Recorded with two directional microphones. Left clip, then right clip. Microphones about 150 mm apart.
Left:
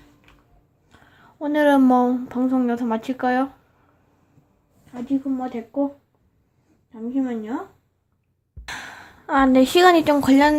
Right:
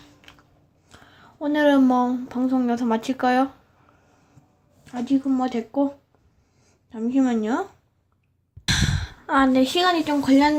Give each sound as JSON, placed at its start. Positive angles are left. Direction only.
{"t": 0.9, "sound": "a sound", "side_deg": -15}
{"t": 1.1, "sound": "a woman's voice", "side_deg": 5}
{"t": 5.3, "sound": "speech", "side_deg": -30}
{"t": 6.9, "sound": "a woman's voice", "side_deg": -40}
{"t": 8.6, "sound": "speech", "side_deg": 5}